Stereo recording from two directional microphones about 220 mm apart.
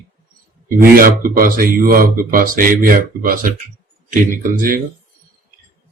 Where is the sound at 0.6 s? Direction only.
40° right (ahead or behind).